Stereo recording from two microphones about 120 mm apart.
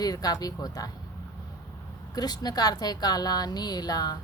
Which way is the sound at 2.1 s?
35° left (ahead or behind).